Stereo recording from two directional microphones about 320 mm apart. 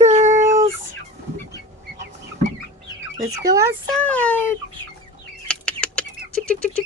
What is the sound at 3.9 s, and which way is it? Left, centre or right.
Speech, centre.